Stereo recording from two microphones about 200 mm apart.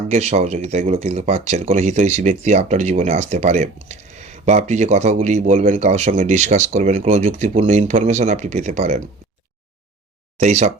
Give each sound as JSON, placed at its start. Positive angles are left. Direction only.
{"t": 0.1, "sound": "speech", "side_deg": -35}
{"t": 10.4, "sound": "speech", "side_deg": -35}